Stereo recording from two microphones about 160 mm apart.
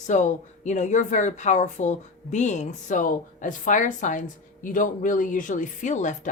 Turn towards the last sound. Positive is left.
turn(degrees=50)  # may be behind; listen again after turning